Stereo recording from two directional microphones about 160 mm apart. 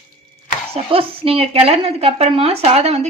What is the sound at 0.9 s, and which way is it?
Speech, 35° right (ahead or behind).